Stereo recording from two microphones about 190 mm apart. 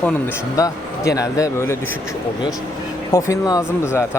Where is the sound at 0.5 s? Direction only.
15° left (ahead or behind).